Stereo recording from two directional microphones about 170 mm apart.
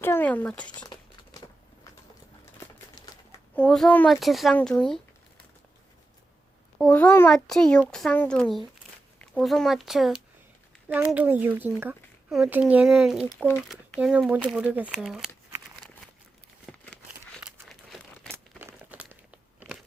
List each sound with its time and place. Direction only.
0.0 s speech: 10° left (ahead or behind)
2.6 s crumpling: 25° left (ahead or behind)
3.5 s a child's voice: 5° left (ahead or behind)
6.7 s a child's voice: 5° left (ahead or behind)
16.7 s crumpling: centre (ahead or behind)
18.6 s crunch: 10° right (ahead or behind)